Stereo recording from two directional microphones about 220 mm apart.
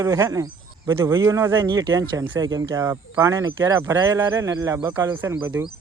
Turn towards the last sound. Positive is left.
turn(degrees=-15)  # may be behind; listen again after turning